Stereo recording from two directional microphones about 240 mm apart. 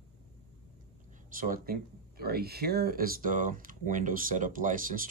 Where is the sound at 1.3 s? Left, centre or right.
Right.